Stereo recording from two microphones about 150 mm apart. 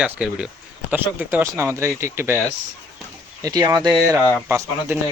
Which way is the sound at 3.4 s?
25° right (ahead or behind).